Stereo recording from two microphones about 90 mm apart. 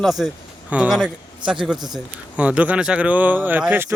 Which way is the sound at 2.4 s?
15° right (ahead or behind).